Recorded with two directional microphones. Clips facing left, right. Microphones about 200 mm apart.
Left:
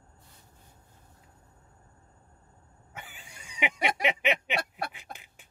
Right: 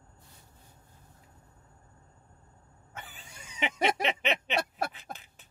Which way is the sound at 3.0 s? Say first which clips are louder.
Even; 10° left (ahead or behind).